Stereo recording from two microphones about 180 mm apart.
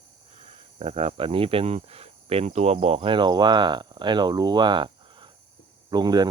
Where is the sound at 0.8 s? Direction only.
35° right (ahead or behind).